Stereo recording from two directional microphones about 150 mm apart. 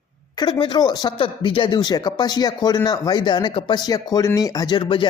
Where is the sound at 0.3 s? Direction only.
30° left (ahead or behind).